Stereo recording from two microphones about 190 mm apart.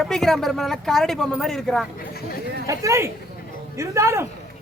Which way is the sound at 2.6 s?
15° right (ahead or behind).